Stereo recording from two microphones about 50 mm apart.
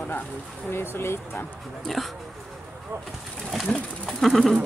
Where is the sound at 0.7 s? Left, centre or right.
Left.